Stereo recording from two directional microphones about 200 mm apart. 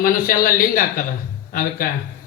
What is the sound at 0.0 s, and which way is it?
Speech, 45° left (ahead or behind).